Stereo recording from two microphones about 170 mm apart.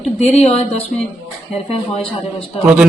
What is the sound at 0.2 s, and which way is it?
Speech, 40° left (ahead or behind).